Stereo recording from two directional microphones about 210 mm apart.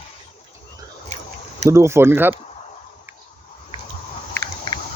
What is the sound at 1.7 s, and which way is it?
Speech, 15° right (ahead or behind).